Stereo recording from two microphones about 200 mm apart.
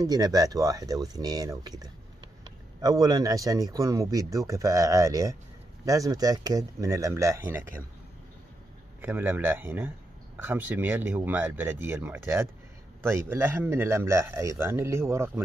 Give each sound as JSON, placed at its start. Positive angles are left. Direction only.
{"t": 0.0, "sound": "speech", "side_deg": -20}
{"t": 9.0, "sound": "speech", "side_deg": -10}